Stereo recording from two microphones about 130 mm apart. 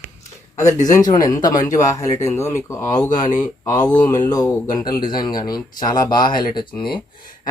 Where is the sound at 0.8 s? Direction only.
30° left (ahead or behind).